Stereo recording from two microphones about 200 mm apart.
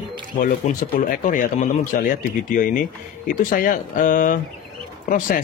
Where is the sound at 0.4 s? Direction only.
40° left (ahead or behind).